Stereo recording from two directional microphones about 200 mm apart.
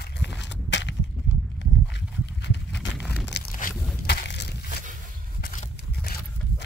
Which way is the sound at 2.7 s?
Centre (ahead or behind).